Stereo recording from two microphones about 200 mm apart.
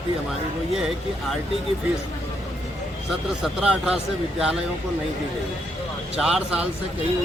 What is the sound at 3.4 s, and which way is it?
A man's voice, 5° right (ahead or behind).